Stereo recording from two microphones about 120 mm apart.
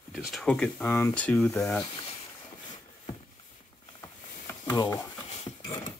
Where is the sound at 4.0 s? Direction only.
30° left (ahead or behind).